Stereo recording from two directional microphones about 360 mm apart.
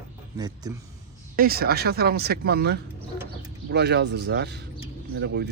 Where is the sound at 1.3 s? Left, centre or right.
Right.